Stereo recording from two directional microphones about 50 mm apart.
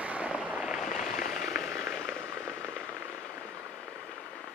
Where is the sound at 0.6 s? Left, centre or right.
Centre.